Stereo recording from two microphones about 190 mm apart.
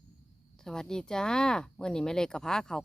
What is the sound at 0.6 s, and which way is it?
Speech, 5° left (ahead or behind).